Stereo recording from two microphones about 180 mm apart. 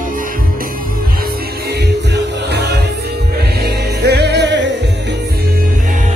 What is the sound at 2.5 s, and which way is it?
Music, 65° right (ahead or behind).